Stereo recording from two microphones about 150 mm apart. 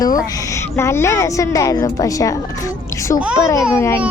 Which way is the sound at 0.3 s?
25° left (ahead or behind).